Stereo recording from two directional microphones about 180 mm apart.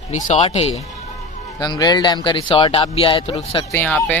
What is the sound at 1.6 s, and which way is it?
Speech, 20° left (ahead or behind).